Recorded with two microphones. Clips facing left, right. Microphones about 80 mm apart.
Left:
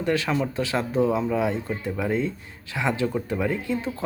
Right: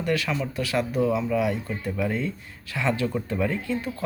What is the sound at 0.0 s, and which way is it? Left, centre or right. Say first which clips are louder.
Speech: left 2 dB; left.